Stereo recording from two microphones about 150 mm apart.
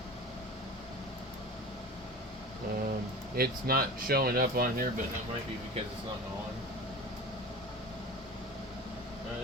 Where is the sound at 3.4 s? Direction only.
85° right.